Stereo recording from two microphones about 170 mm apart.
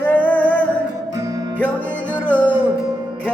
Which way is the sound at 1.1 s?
20° right (ahead or behind).